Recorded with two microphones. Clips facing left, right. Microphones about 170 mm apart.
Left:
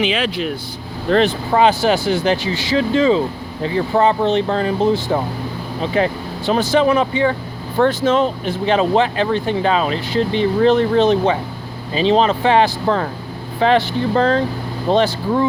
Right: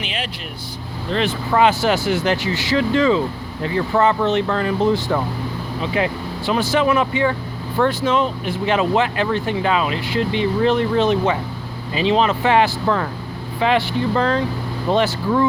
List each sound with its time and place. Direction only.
0.0 s speech: 90° left
1.1 s speech: 40° left (ahead or behind)
1.5 s speech: 25° left (ahead or behind)
5.8 s speech: 35° left (ahead or behind)
8.0 s speech: 40° left (ahead or behind)